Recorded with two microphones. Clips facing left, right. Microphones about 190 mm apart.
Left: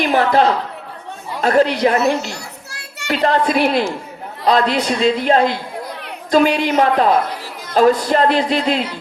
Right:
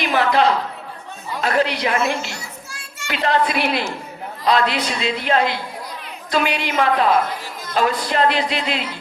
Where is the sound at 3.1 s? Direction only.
40° left (ahead or behind).